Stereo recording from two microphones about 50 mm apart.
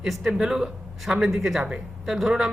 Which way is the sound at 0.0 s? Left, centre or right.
Centre.